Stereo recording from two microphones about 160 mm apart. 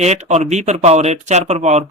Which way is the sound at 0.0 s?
45° right (ahead or behind).